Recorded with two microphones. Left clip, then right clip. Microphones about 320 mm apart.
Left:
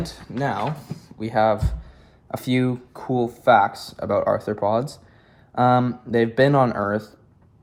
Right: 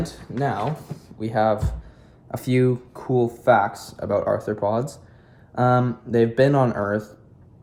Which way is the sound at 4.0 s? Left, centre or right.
Left.